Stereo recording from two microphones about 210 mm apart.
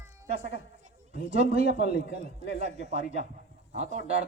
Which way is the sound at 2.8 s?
30° right (ahead or behind).